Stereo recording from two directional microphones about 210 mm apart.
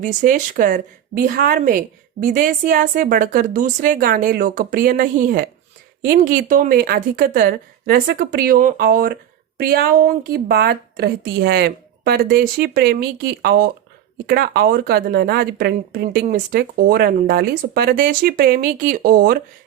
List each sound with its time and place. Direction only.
0.0 s a woman's voice: 35° right (ahead or behind)